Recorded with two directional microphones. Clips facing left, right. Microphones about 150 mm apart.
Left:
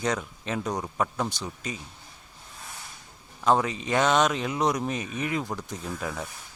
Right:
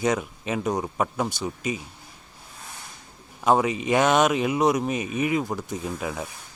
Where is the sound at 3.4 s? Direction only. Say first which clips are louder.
Right 3 dB; 10° right (ahead or behind).